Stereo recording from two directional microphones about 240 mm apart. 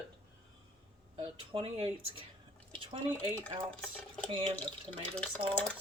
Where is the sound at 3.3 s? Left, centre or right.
Centre.